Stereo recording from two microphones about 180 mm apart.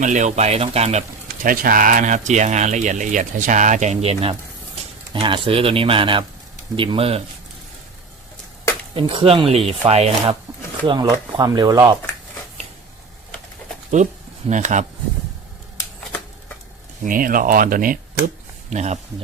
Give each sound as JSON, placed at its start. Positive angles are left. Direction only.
{"t": 0.0, "sound": "speech", "side_deg": -40}
{"t": 1.5, "sound": "speech", "side_deg": -50}
{"t": 9.0, "sound": "speech", "side_deg": -30}
{"t": 10.8, "sound": "speech", "side_deg": -25}
{"t": 13.9, "sound": "speech", "side_deg": -40}
{"t": 17.0, "sound": "speech", "side_deg": -50}
{"t": 18.7, "sound": "speech", "side_deg": -40}